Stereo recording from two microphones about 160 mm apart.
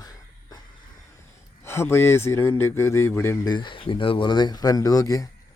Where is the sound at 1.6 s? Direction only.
15° left (ahead or behind).